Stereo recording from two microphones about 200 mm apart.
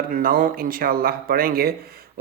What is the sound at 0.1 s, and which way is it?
Speech, 45° right (ahead or behind).